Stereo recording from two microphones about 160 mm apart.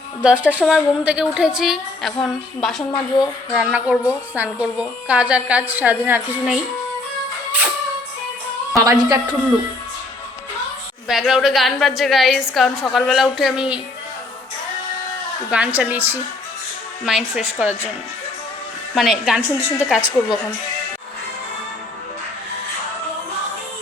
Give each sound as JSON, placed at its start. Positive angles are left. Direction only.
{"t": 0.2, "sound": "a woman's voice", "side_deg": -5}
{"t": 8.7, "sound": "a woman's voice", "side_deg": -20}
{"t": 11.1, "sound": "a woman's voice", "side_deg": 0}
{"t": 15.4, "sound": "a woman's voice", "side_deg": -10}
{"t": 18.9, "sound": "a woman's voice", "side_deg": -5}
{"t": 20.0, "sound": "a woman's voice", "side_deg": 25}